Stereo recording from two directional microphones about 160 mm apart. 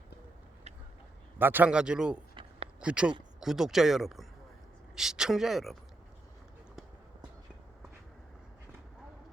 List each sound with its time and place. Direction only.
1.4 s speech: 10° right (ahead or behind)
2.3 s a sound: 35° right (ahead or behind)
2.8 s speech: 5° right (ahead or behind)